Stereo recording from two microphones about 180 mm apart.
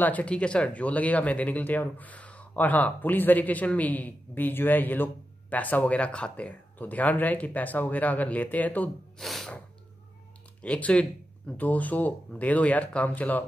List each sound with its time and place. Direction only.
0.0 s speech: 10° left (ahead or behind)
10.6 s speech: 5° left (ahead or behind)